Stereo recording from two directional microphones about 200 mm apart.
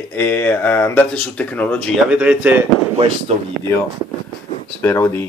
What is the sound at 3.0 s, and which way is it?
Speech, 30° right (ahead or behind).